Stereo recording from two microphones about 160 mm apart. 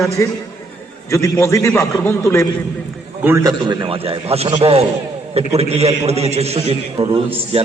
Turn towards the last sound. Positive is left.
turn(degrees=-35)  # may be behind; listen again after turning